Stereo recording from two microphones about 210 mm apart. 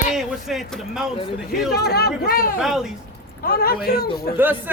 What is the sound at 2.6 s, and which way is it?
Speech, centre (ahead or behind).